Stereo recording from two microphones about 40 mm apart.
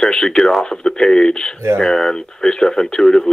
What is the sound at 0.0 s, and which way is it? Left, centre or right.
Speech, centre.